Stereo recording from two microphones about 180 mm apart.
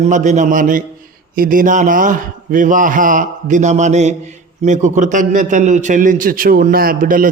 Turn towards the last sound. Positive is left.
turn(degrees=-50)  # may be behind; listen again after turning